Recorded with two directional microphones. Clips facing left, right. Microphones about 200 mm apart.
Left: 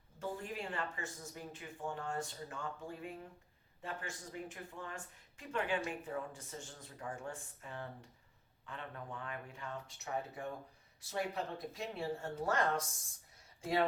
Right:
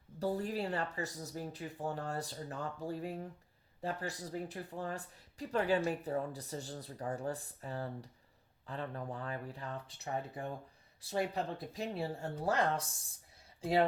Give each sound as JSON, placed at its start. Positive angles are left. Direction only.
{"t": 0.2, "sound": "speech", "side_deg": -35}